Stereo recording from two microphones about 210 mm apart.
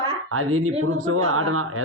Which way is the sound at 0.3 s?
90° right.